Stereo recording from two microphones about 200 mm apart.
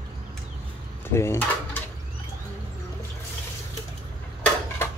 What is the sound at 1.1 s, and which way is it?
Speech, 15° left (ahead or behind).